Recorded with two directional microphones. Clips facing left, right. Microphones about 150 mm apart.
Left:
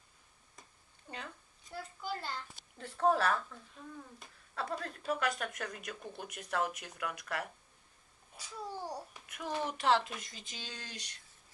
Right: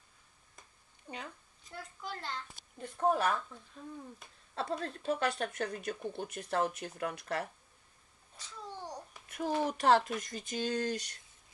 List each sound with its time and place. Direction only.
1.7 s a child's voice: 5° left (ahead or behind)
2.8 s speech: 15° right (ahead or behind)
4.6 s speech: 25° right (ahead or behind)
8.4 s babbling: 10° left (ahead or behind)
9.3 s speech: 40° right (ahead or behind)